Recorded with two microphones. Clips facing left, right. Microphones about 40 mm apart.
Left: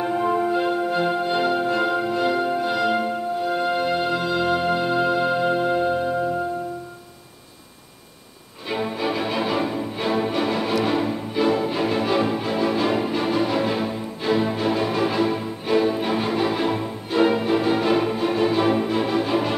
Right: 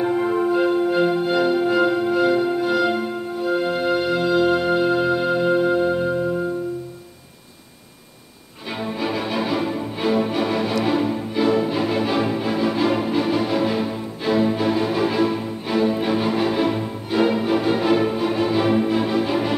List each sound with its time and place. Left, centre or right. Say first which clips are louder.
0.0 s music: right 2 dB; centre
2.5 s music: right 2 dB; centre
8.6 s music: left 1 dB; centre